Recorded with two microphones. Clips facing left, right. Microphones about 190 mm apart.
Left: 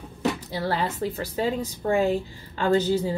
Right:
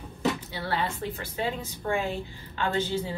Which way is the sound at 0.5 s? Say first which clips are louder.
Left 4 dB; 40° left (ahead or behind).